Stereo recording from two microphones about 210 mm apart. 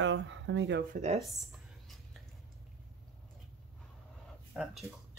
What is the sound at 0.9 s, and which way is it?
Speech, 30° right (ahead or behind).